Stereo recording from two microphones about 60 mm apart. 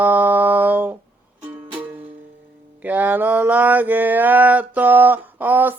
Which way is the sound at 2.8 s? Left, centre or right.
Right.